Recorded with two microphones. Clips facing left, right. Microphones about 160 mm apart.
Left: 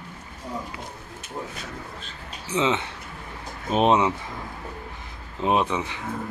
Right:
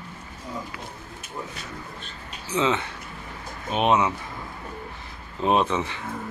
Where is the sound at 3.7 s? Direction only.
35° left (ahead or behind).